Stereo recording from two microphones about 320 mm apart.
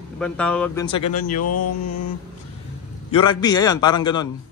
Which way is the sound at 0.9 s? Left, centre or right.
Centre.